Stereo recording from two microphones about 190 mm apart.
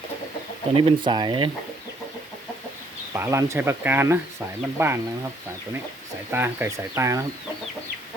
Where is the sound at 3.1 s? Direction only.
15° right (ahead or behind).